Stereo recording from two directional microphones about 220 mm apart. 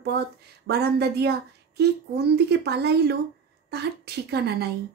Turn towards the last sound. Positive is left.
turn(degrees=-45)  # may be behind; listen again after turning